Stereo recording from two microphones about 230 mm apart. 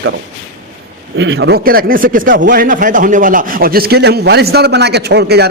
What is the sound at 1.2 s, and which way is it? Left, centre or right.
A man's voice, right.